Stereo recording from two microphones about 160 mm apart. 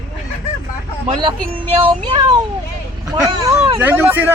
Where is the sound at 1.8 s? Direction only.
30° right (ahead or behind).